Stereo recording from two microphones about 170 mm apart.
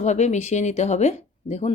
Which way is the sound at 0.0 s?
40° left (ahead or behind).